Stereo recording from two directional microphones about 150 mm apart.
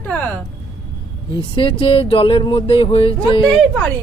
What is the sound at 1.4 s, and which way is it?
Speech, 35° left (ahead or behind).